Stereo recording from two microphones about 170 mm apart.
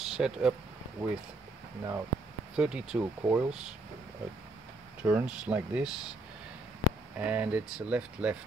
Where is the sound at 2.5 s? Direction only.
5° right (ahead or behind).